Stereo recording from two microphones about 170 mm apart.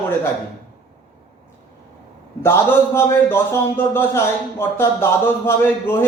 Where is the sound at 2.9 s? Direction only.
15° left (ahead or behind).